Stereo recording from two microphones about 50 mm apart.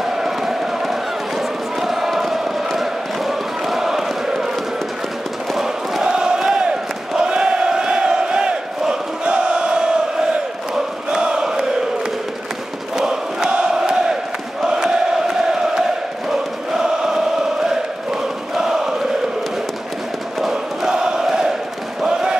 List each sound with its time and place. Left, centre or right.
0.0 s chant: centre
5.5 s chant: centre
6.0 s crowd: centre
10.7 s a sound: centre
12.9 s a sound: centre
16.3 s choir: centre
18.5 s chant: centre
20.3 s chant: centre
20.9 s a sound: centre
22.0 s basketball bounce: centre